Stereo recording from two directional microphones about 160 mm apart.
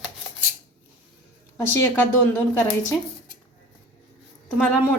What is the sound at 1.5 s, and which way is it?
Speech, 15° left (ahead or behind).